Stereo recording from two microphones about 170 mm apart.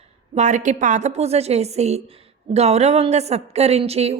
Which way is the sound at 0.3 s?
45° right (ahead or behind).